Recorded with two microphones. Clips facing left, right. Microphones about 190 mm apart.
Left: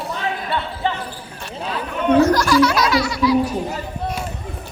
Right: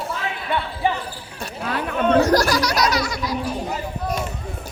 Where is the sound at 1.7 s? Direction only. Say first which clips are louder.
Left 1 dB; 65° right (ahead or behind).